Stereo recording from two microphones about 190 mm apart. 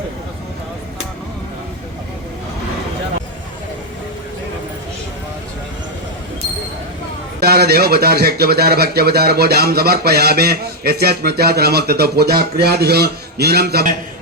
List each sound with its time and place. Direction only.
7.3 s speech: 55° right (ahead or behind)